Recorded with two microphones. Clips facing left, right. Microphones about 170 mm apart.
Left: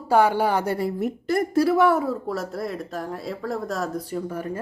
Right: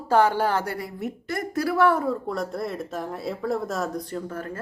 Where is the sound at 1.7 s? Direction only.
10° left (ahead or behind).